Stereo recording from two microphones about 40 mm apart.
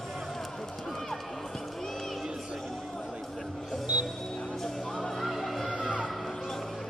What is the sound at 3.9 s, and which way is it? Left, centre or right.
Music, right.